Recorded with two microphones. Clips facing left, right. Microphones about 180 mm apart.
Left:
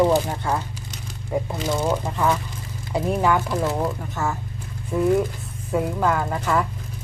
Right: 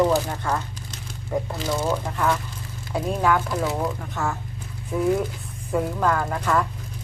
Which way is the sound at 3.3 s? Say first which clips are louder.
Left 1 dB; centre (ahead or behind).